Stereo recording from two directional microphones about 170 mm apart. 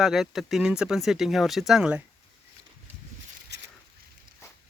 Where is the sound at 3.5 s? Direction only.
90° right.